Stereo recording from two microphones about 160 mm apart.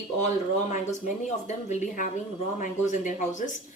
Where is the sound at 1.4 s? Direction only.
50° left (ahead or behind).